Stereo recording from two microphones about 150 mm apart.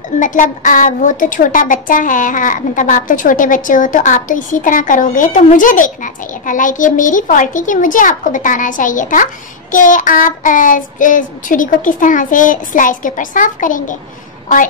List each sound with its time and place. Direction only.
0.2 s a child's voice: 60° left (ahead or behind)